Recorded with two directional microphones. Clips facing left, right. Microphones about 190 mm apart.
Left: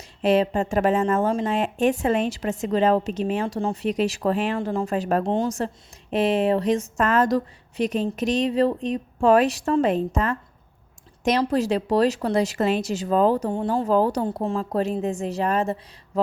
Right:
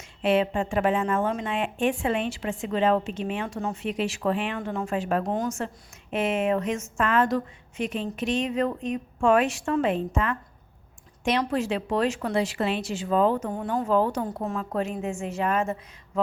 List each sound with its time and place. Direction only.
0.2 s a woman's voice: 40° left (ahead or behind)